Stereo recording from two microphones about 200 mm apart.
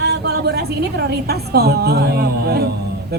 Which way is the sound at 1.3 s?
50° right (ahead or behind).